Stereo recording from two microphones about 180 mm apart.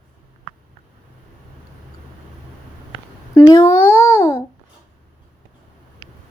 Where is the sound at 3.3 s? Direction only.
15° left (ahead or behind).